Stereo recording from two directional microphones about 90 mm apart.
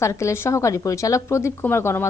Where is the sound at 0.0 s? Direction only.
35° left (ahead or behind).